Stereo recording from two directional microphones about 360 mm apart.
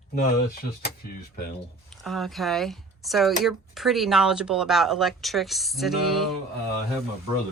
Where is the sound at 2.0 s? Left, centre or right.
Centre.